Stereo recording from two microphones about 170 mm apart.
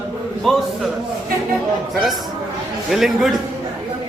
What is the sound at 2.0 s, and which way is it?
A man's voice, centre (ahead or behind).